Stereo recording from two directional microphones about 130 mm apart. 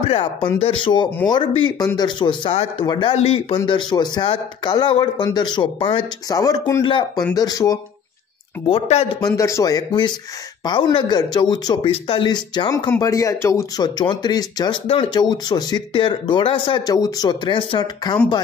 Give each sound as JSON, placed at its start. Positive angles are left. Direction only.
{"t": 0.0, "sound": "speech", "side_deg": 45}
{"t": 3.5, "sound": "speech", "side_deg": 35}
{"t": 6.2, "sound": "speech", "side_deg": 30}
{"t": 8.6, "sound": "speech", "side_deg": 50}
{"t": 9.2, "sound": "speech", "side_deg": 25}
{"t": 13.0, "sound": "speech", "side_deg": 25}